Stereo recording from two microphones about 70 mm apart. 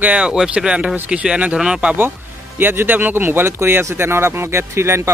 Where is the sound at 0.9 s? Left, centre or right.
Centre.